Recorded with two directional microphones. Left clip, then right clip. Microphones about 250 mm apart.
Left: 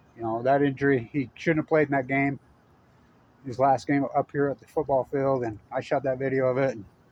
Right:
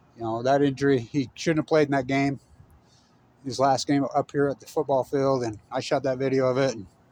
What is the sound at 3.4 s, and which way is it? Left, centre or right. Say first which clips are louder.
Speech: even; right.